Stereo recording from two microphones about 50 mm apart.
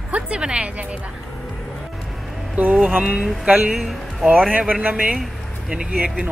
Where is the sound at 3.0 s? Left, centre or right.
Right.